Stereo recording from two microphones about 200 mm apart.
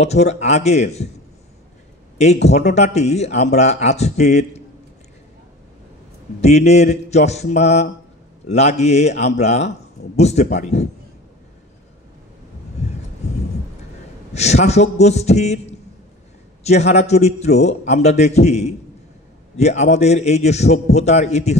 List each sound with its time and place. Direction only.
0.0 s speech: 35° left (ahead or behind)
2.4 s speech: 35° left (ahead or behind)
6.4 s speech: 35° left (ahead or behind)
14.3 s speech: 35° left (ahead or behind)